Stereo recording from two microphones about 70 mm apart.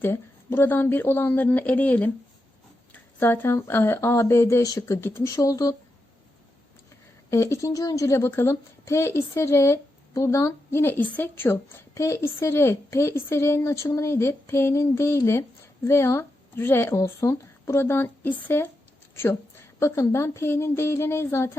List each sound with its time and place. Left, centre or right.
0.0 s a woman's voice: left
4.6 s speech: left
4.9 s a woman's voice: left
5.2 s speech: left
7.3 s a woman's voice: left
11.4 s a woman's voice: left